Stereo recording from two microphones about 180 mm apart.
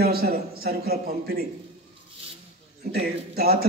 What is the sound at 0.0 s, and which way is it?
Speech, 60° right (ahead or behind).